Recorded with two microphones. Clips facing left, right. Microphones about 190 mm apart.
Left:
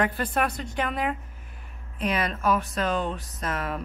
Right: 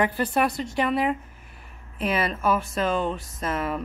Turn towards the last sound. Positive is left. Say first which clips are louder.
# right 3 dB
turn(degrees=-5)  # may be behind; listen again after turning